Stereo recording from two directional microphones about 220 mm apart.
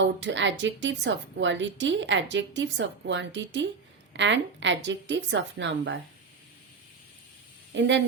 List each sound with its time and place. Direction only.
0.0 s a woman's voice: 55° right (ahead or behind)
7.7 s a woman's voice: 55° right (ahead or behind)